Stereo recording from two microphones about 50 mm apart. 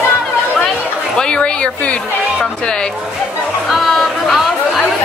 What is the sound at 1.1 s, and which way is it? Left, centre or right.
Speech, centre.